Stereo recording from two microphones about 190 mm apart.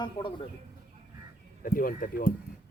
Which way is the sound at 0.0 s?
25° left (ahead or behind).